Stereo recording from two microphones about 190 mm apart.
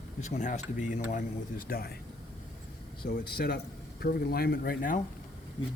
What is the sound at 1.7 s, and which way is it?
Speech, 50° left (ahead or behind).